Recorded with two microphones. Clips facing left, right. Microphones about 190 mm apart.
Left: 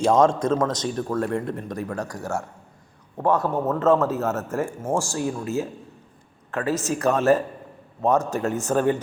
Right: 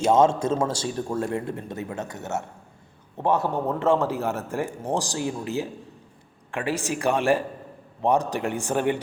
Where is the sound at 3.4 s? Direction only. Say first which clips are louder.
Left 2 dB; 15° right (ahead or behind).